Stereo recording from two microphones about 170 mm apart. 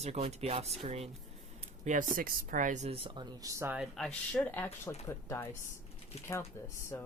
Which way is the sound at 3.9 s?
5° left (ahead or behind).